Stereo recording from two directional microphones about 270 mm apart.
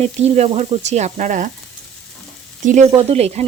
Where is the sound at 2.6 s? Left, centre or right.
Right.